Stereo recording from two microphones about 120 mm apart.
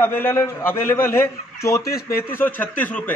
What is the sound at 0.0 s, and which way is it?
A man's voice, 20° left (ahead or behind).